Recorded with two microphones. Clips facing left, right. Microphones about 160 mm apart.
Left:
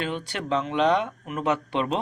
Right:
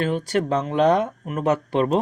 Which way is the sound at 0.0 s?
40° right (ahead or behind).